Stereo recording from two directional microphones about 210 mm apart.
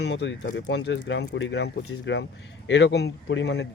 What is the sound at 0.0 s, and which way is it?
Speech, 55° left (ahead or behind).